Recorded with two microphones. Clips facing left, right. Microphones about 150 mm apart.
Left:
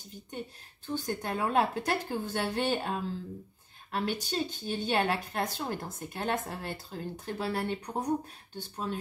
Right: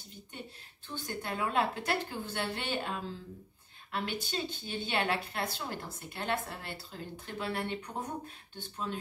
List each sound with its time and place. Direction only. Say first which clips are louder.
0.8 s a woman's voice: left 5 dB; 45° left (ahead or behind)